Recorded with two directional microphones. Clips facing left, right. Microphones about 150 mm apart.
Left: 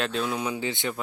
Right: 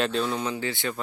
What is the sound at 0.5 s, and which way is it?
Speech, 20° left (ahead or behind).